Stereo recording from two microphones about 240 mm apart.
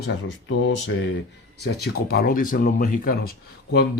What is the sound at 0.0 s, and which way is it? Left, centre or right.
Speech, left.